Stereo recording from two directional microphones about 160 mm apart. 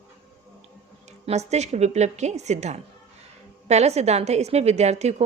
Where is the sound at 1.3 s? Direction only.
45° right (ahead or behind).